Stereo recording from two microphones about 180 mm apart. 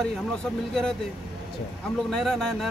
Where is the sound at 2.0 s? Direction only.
Centre (ahead or behind).